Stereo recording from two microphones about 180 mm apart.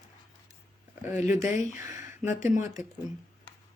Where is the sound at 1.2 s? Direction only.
45° left (ahead or behind).